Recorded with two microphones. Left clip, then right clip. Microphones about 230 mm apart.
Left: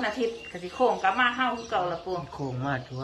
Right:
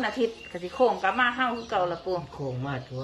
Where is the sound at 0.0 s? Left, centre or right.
Centre.